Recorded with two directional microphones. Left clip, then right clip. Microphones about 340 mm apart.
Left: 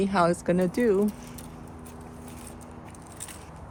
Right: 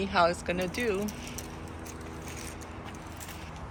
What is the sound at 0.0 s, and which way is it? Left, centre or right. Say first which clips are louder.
Speech: left 2 dB; left.